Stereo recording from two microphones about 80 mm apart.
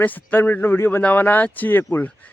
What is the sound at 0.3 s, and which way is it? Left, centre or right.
Speech, left.